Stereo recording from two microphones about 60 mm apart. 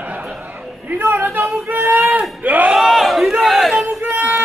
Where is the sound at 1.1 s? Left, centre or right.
Right.